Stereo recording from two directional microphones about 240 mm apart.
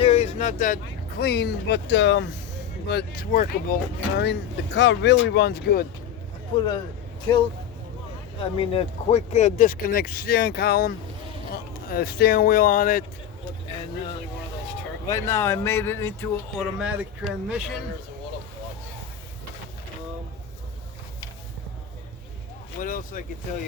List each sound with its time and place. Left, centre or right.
0.0 s speech: left
6.6 s speech: centre; by 13.1 s left
15.0 s speech: centre
16.6 s speech: centre
22.8 s speech: left